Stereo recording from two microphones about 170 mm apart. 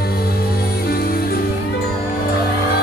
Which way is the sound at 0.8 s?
65° left (ahead or behind).